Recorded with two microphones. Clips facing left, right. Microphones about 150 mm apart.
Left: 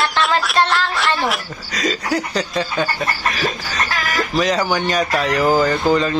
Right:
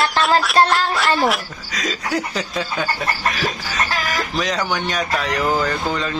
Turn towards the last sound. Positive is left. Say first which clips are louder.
# left 6 dB
turn(degrees=5)  # may be behind; listen again after turning